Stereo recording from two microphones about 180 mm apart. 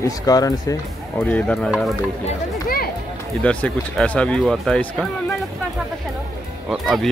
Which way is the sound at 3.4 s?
5° left (ahead or behind).